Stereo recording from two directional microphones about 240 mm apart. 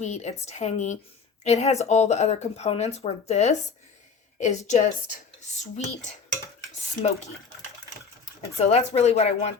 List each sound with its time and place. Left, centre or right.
0.0 s speech: left
8.2 s speech: left